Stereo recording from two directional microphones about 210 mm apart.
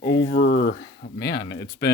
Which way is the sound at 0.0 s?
50° left (ahead or behind).